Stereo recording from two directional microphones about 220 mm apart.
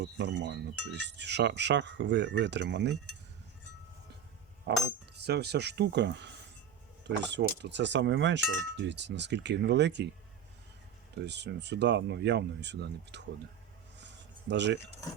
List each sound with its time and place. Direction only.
0.0 s speech: 50° right (ahead or behind)
4.7 s speech: 50° right (ahead or behind)
11.2 s speech: 50° right (ahead or behind)
14.0 s a sound: 50° right (ahead or behind)